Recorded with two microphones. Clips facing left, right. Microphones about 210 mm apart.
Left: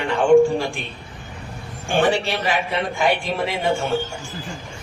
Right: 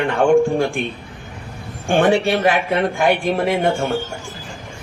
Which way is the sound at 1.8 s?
55° right (ahead or behind).